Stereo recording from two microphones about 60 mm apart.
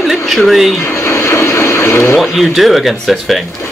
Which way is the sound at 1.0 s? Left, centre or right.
Left.